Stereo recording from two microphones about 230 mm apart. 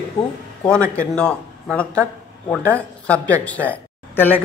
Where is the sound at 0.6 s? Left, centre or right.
Centre.